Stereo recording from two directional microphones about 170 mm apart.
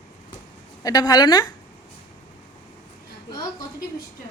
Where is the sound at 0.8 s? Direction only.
20° left (ahead or behind).